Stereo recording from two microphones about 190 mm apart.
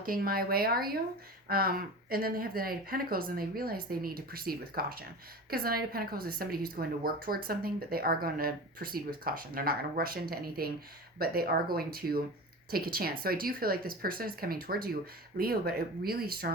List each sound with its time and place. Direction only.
0.0 s a woman's voice: 50° right (ahead or behind)